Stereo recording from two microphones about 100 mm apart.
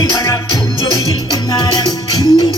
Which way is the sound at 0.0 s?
30° left (ahead or behind).